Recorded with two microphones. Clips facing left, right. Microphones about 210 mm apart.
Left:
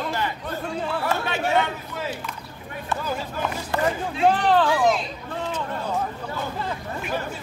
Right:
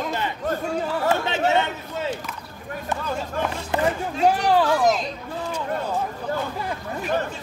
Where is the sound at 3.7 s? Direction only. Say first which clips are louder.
Right 1 dB; 20° right (ahead or behind).